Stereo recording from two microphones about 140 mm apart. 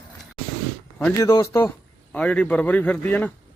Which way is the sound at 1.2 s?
25° left (ahead or behind).